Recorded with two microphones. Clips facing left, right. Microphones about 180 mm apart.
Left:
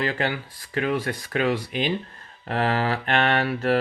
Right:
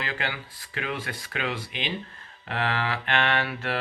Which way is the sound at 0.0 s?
40° left (ahead or behind).